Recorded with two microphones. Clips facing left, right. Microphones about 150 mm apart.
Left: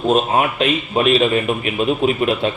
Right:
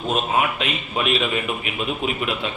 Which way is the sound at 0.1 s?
40° left (ahead or behind).